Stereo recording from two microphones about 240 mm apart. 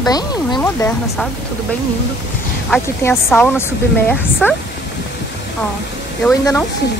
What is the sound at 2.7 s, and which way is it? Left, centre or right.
A woman's voice, centre.